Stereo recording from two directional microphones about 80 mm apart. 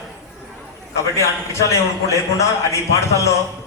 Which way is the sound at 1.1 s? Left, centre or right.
Left.